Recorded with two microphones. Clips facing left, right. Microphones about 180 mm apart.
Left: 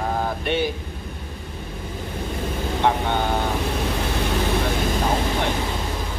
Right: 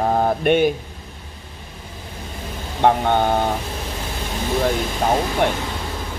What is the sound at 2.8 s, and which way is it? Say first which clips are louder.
Speech: right 6 dB; 50° right (ahead or behind).